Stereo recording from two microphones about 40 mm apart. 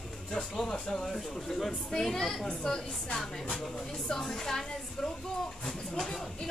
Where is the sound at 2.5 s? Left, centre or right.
Left.